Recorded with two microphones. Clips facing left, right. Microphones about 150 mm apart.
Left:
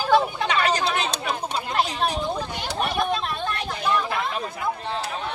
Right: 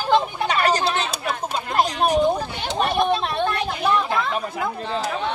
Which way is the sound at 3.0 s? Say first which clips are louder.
Right 5 dB; 30° right (ahead or behind).